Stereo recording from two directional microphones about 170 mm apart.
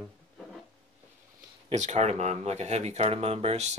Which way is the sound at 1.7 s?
45° right (ahead or behind).